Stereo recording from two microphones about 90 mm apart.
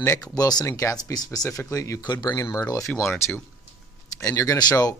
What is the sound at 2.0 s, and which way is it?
Speech, 50° left (ahead or behind).